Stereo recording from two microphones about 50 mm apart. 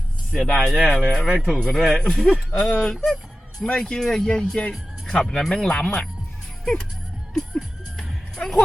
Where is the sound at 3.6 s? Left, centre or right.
Centre.